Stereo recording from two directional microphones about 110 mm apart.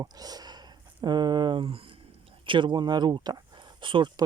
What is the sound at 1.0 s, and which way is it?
Speech, 40° right (ahead or behind).